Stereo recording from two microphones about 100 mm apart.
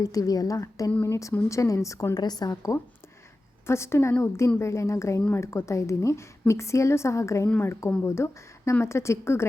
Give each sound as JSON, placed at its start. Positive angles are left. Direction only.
{"t": 0.0, "sound": "a woman's voice", "side_deg": 35}
{"t": 0.9, "sound": "speech", "side_deg": 15}
{"t": 1.5, "sound": "a woman's voice", "side_deg": 30}